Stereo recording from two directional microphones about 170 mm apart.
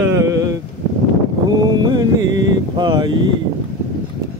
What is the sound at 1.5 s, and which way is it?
Mantra, 25° right (ahead or behind).